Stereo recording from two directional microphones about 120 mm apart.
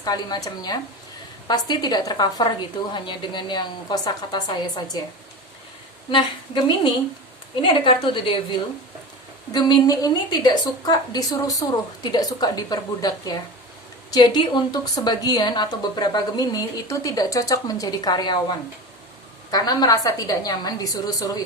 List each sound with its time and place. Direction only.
0.0 s a woman's voice: 35° left (ahead or behind)
6.1 s a woman's voice: 45° left (ahead or behind)